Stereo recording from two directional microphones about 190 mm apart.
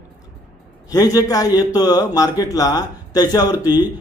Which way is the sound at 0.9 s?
20° left (ahead or behind).